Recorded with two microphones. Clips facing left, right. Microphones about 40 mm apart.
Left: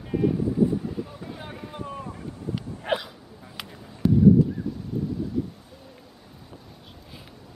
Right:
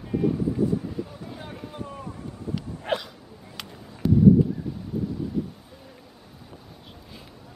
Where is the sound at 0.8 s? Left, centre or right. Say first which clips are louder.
Left 1 dB; centre.